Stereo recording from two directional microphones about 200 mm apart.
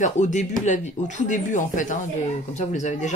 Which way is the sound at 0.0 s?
35° left (ahead or behind).